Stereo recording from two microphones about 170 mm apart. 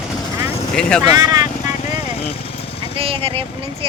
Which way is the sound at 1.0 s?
20° right (ahead or behind).